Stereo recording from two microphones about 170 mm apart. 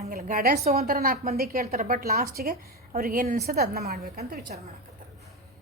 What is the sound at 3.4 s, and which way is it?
Speech, 65° right (ahead or behind).